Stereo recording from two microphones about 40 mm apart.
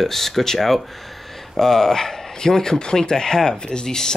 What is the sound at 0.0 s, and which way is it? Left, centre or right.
Speech, centre.